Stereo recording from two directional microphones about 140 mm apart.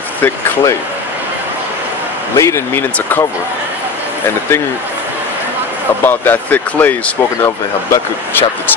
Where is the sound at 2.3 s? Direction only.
20° left (ahead or behind).